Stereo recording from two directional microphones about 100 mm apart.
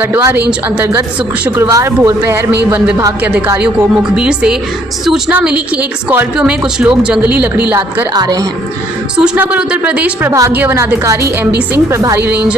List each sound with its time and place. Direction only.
0.2 s speech: 20° right (ahead or behind)
1.6 s speech: 30° right (ahead or behind)
4.2 s speech: 10° right (ahead or behind)
8.1 s a woman's voice: 40° right (ahead or behind)
9.1 s speech: 10° right (ahead or behind)